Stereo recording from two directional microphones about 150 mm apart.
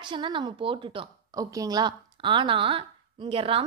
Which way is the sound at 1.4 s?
25° right (ahead or behind).